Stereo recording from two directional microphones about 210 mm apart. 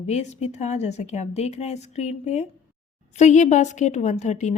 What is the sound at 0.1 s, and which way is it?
Speech, 35° left (ahead or behind).